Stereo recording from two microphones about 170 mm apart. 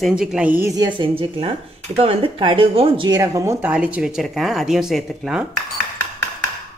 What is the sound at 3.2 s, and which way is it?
Speech, 20° right (ahead or behind).